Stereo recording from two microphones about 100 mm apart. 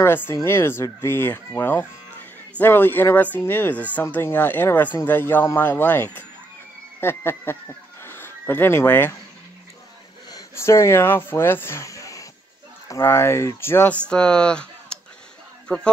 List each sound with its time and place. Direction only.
0.0 s speech: 25° left (ahead or behind)
8.0 s a sound: 20° left (ahead or behind)
10.5 s speech: 25° left (ahead or behind)
13.9 s speech: 10° left (ahead or behind)